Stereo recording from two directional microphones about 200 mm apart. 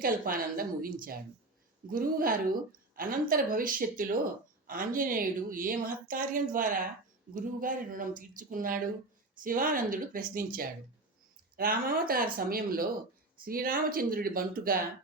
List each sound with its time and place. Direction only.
0.0 s a woman's voice: 45° right (ahead or behind)